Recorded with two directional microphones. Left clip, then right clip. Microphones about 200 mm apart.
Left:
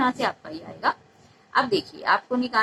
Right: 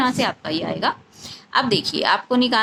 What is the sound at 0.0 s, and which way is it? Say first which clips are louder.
A woman's voice: right 3 dB; 30° right (ahead or behind).